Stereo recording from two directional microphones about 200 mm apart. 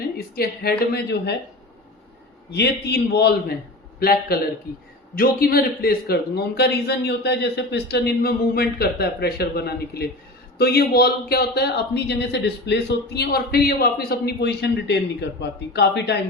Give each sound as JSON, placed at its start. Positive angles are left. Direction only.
{"t": 0.3, "sound": "a woman's voice", "side_deg": 50}
{"t": 2.5, "sound": "a woman's voice", "side_deg": 55}